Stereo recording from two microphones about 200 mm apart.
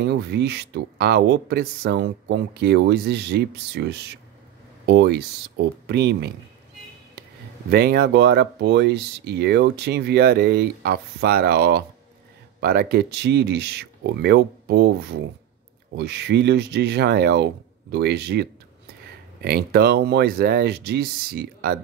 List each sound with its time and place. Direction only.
0.0 s speech: 55° right (ahead or behind)
7.7 s speech: 55° right (ahead or behind)